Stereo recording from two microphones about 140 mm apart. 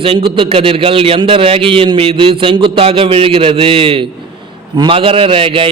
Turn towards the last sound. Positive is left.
turn(degrees=-40)  # may be behind; listen again after turning